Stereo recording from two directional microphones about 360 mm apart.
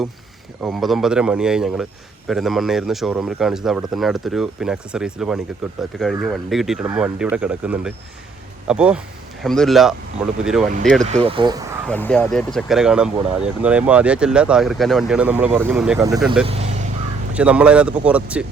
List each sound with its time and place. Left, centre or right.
0.6 s a man's voice: centre
11.0 s speech: centre
11.9 s a man's voice: centre
16.5 s speech: centre
17.3 s a man's voice: centre